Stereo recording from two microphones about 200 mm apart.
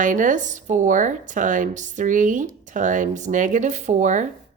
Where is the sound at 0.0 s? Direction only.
40° right (ahead or behind).